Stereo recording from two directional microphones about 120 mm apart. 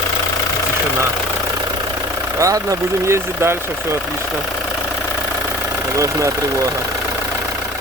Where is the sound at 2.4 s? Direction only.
25° right (ahead or behind).